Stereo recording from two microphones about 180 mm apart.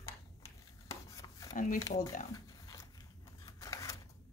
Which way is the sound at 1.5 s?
45° left (ahead or behind).